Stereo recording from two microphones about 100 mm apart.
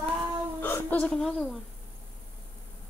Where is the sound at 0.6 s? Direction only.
20° left (ahead or behind).